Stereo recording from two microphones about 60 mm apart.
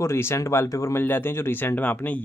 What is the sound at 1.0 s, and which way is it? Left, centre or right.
Speech, left.